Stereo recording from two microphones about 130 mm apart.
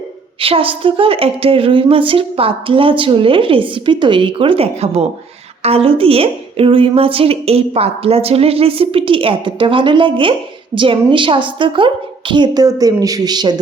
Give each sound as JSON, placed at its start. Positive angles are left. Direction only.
{"t": 0.3, "sound": "a woman's voice", "side_deg": -45}